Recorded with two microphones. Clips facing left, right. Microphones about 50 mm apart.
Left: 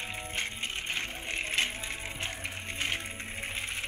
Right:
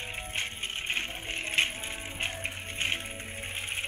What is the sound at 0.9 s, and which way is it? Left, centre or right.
Sewing machine, right.